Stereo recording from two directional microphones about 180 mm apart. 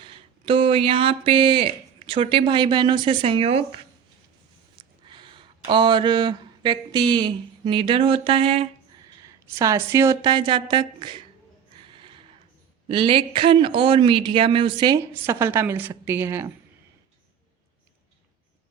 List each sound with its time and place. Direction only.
0.0 s speech: 30° right (ahead or behind)
4.8 s speech: 25° right (ahead or behind)
9.2 s speech: 15° right (ahead or behind)
11.9 s snort: 30° right (ahead or behind)
12.9 s a woman's voice: 30° right (ahead or behind)